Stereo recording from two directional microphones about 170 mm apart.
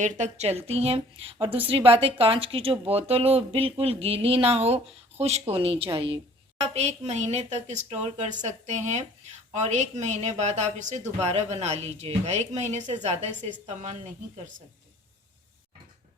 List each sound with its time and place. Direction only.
0.0 s speech: 40° right (ahead or behind)